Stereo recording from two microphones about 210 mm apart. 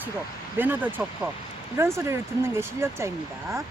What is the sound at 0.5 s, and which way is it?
Speech, 10° right (ahead or behind).